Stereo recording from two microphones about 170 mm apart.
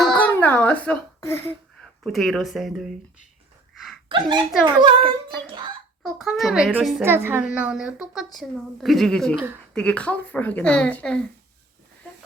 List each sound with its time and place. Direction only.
0.0 s music: 5° left (ahead or behind)
0.3 s a woman's voice: 10° left (ahead or behind)
4.1 s a child's voice: 30° right (ahead or behind)
6.0 s a woman's voice: centre (ahead or behind)
7.0 s a woman's voice: 15° right (ahead or behind); by 11.2 s 5° left (ahead or behind)